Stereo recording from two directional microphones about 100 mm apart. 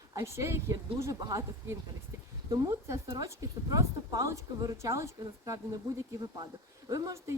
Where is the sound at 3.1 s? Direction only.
35° right (ahead or behind).